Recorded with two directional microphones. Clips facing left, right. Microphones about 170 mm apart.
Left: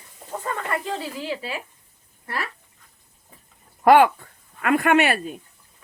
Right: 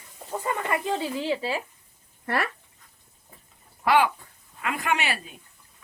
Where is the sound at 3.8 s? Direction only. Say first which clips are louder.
Left 7 dB; 50° left (ahead or behind).